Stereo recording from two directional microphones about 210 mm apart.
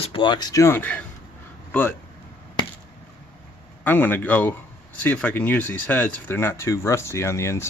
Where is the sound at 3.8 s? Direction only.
10° left (ahead or behind).